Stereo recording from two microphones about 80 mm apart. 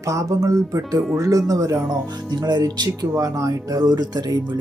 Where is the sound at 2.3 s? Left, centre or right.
Right.